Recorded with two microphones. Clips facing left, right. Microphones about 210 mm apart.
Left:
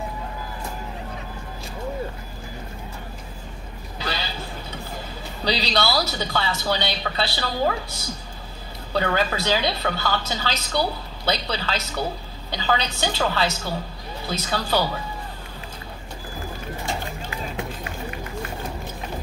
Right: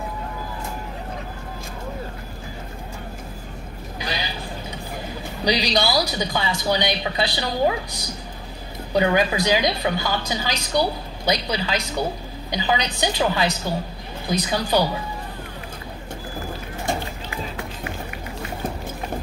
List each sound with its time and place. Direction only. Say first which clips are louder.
4.0 s vehicle: even; 15° right (ahead or behind)
5.4 s speech: right 2 dB; 15° right (ahead or behind)